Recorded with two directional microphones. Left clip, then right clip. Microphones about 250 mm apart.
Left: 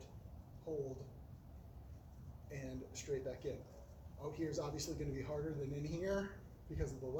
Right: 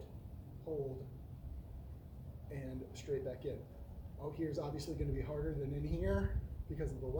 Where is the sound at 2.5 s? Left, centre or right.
Centre.